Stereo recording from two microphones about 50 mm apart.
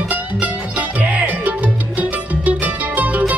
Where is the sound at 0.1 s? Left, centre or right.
Right.